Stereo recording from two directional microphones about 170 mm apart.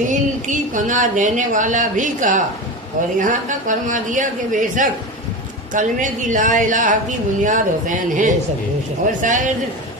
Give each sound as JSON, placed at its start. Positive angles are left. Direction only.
{"t": 0.1, "sound": "a woman's voice", "side_deg": -50}